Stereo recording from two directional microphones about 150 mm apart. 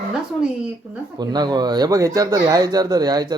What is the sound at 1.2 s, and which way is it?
Speech, 30° right (ahead or behind).